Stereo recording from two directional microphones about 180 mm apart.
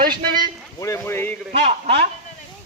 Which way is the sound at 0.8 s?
15° left (ahead or behind).